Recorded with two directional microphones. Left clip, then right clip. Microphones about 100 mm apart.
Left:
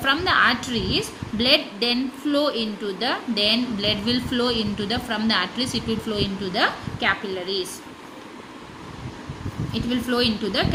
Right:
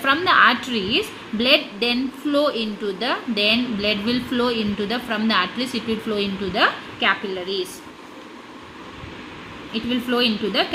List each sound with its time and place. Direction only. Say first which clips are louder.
0.0 s a woman's voice: right 3 dB; 25° right (ahead or behind)
9.7 s a woman's voice: right 2 dB; 20° right (ahead or behind)